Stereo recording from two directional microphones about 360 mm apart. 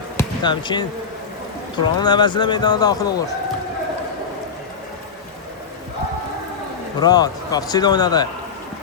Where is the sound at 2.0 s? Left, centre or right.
Centre.